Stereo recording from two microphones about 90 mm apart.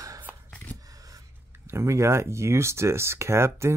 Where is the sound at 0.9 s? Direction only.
40° right (ahead or behind).